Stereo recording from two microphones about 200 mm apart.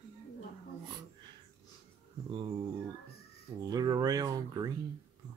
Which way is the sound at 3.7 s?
20° right (ahead or behind).